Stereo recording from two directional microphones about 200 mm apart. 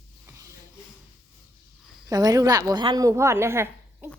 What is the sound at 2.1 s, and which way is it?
A child's voice, 20° right (ahead or behind).